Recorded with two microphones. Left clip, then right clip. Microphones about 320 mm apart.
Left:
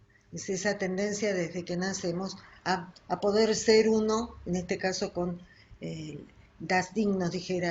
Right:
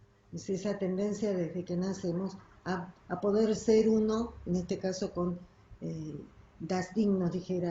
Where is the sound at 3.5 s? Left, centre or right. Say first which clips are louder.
Left 3 dB; centre.